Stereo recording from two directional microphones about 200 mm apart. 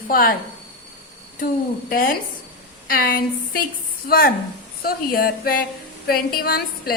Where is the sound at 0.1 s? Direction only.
45° left (ahead or behind).